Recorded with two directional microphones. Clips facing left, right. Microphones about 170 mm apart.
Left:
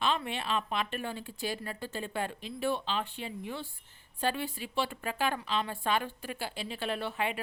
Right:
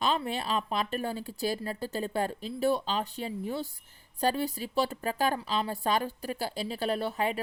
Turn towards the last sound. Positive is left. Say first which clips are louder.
# right 4 dB
turn(degrees=-40)  # may be behind; listen again after turning